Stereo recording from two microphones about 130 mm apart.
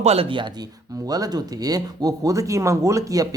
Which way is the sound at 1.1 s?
30° right (ahead or behind).